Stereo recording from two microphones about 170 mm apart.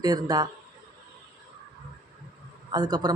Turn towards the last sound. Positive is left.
turn(degrees=-25)  # may be behind; listen again after turning